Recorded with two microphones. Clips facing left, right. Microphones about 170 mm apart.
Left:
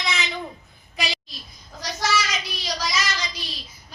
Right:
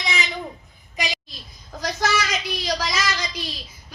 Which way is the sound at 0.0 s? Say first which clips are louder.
Right 1 dB; 15° right (ahead or behind).